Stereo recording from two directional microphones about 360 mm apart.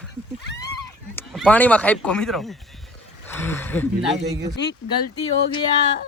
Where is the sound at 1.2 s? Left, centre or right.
Centre.